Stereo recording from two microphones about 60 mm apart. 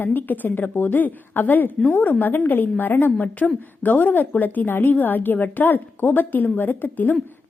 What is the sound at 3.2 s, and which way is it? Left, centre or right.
A woman's voice, left.